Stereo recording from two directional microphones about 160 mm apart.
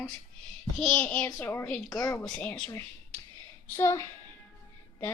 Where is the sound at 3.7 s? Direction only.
15° left (ahead or behind).